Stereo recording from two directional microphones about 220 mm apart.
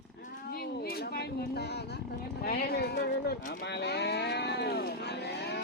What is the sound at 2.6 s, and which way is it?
Cattle, 45° left (ahead or behind).